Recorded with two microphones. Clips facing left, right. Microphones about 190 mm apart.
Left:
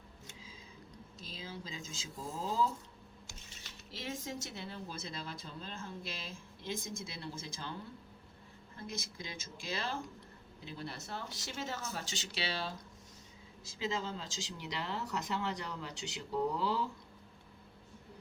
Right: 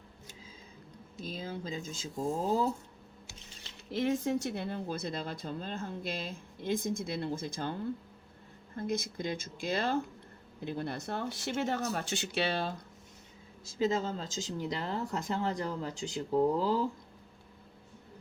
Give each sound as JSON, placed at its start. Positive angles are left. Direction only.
{"t": 1.3, "sound": "speech", "side_deg": -55}
{"t": 3.9, "sound": "speech", "side_deg": -60}
{"t": 13.7, "sound": "speech", "side_deg": -45}